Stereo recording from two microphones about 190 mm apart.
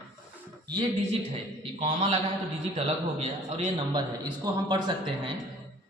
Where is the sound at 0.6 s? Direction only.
25° right (ahead or behind).